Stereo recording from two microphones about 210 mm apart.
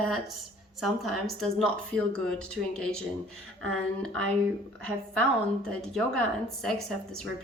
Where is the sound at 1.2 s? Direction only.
Centre (ahead or behind).